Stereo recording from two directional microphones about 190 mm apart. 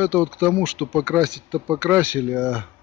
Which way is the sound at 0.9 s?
15° right (ahead or behind).